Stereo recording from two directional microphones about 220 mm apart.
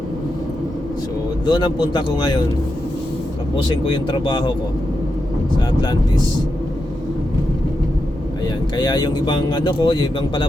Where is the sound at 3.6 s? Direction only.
20° left (ahead or behind).